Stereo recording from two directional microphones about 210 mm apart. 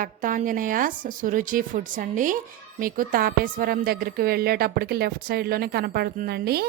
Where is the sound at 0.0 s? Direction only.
40° right (ahead or behind).